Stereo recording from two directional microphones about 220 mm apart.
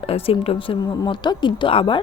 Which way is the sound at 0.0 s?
25° left (ahead or behind).